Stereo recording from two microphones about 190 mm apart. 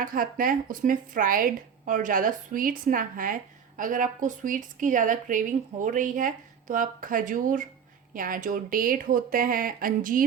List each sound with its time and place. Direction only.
0.0 s speech: 45° right (ahead or behind)